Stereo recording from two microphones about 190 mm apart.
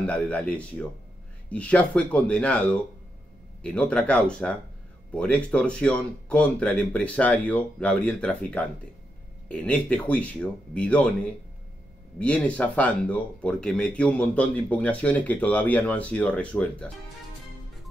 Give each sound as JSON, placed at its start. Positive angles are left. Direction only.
{"t": 0.0, "sound": "speech", "side_deg": 5}